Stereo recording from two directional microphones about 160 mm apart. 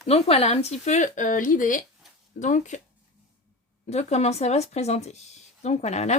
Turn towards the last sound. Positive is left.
turn(degrees=45)  # may be behind; listen again after turning